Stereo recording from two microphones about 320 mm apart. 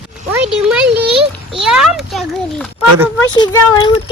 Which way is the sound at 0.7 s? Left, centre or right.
Centre.